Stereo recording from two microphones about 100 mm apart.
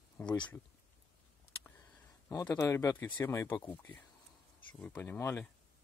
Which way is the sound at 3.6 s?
20° left (ahead or behind).